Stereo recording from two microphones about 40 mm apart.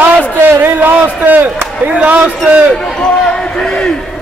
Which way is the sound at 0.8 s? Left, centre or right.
Right.